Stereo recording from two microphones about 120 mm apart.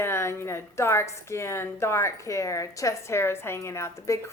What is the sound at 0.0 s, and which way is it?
A woman's voice, 20° left (ahead or behind).